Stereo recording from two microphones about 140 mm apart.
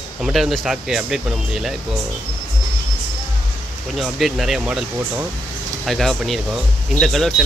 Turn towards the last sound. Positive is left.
turn(degrees=0)  # may be behind; listen again after turning